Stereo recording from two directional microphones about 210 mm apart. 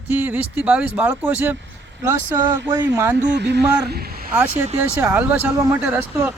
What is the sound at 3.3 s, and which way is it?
Speech, 55° right (ahead or behind).